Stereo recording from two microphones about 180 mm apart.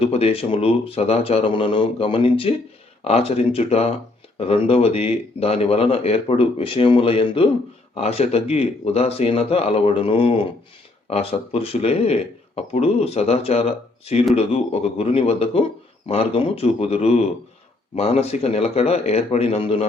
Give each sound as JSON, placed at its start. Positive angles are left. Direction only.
{"t": 0.0, "sound": "speech", "side_deg": 35}